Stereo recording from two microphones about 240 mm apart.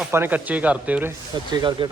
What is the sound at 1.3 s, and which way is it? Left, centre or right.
Speech, centre.